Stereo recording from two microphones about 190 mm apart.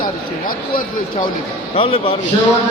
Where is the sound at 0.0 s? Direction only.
45° left (ahead or behind).